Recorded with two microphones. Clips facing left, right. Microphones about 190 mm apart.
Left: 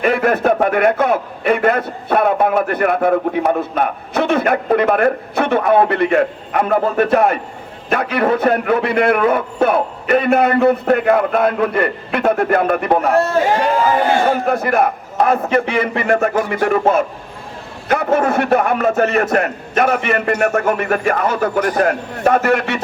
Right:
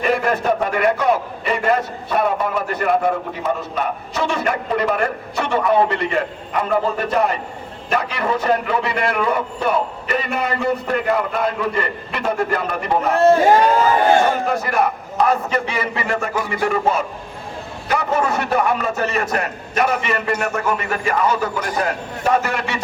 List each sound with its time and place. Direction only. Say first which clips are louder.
0.0 s a man's voice: left 4 dB; 60° left (ahead or behind)
14.3 s a man's voice: left 4 dB; 55° left (ahead or behind)